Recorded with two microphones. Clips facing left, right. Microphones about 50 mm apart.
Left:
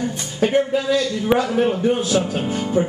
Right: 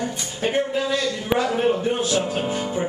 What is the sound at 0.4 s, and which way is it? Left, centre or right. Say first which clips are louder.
A man's voice: left 4 dB; centre.